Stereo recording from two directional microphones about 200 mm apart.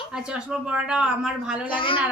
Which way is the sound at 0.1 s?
5° right (ahead or behind).